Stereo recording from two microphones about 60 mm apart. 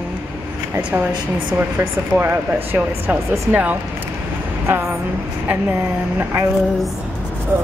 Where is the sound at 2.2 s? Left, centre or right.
Right.